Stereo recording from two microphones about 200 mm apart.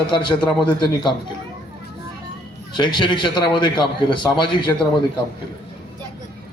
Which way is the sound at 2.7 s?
20° left (ahead or behind).